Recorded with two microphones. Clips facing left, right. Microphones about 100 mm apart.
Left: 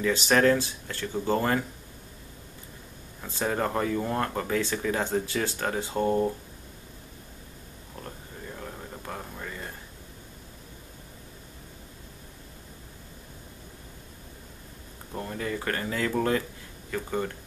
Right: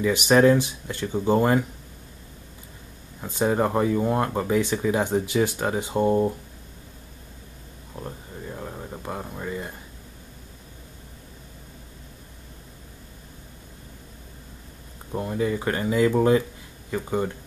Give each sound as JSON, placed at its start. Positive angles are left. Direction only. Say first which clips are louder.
{"t": 0.0, "sound": "speech", "louder": "right 5 dB", "side_deg": -15}
{"t": 3.2, "sound": "speech", "louder": "right 6 dB", "side_deg": -15}
{"t": 8.0, "sound": "a sound", "louder": "right 5 dB", "side_deg": -15}
{"t": 15.1, "sound": "speech", "louder": "right 7 dB", "side_deg": -15}